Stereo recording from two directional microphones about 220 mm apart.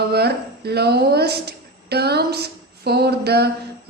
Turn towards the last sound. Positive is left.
turn(degrees=-45)  # may be behind; listen again after turning